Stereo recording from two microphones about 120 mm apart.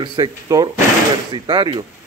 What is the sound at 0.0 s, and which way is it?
Speech, 40° right (ahead or behind).